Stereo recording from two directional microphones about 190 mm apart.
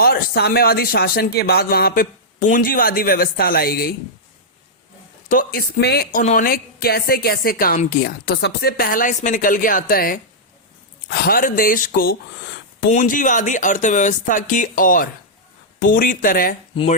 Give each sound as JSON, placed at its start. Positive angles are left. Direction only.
{"t": 0.0, "sound": "speech", "side_deg": 55}
{"t": 5.3, "sound": "speech", "side_deg": 50}